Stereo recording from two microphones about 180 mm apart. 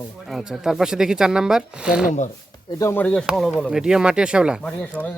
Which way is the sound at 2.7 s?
15° left (ahead or behind).